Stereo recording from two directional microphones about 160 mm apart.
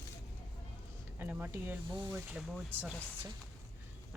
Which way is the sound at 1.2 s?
15° right (ahead or behind).